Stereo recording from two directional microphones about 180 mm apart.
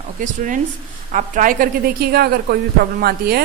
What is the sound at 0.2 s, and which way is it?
A woman's voice, 45° right (ahead or behind).